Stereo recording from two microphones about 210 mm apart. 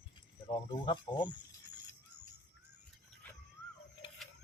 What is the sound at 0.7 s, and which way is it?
Speech, 20° left (ahead or behind).